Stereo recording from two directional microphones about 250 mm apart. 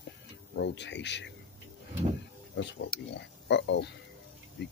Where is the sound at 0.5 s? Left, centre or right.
Left.